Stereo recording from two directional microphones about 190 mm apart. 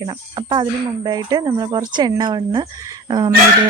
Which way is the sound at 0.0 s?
20° right (ahead or behind).